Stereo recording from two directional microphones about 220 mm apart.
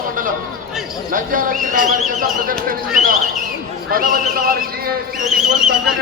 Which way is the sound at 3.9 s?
40° right (ahead or behind).